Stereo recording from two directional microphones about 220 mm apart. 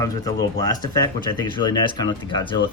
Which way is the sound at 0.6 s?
15° left (ahead or behind).